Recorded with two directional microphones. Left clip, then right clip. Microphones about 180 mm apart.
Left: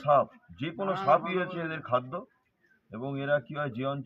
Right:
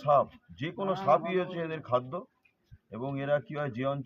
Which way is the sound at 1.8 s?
Centre (ahead or behind).